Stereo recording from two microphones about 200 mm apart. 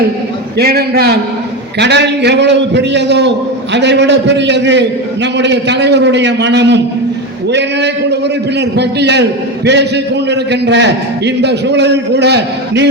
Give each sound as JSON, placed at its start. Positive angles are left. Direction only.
{"t": 0.6, "sound": "a man's voice", "side_deg": -50}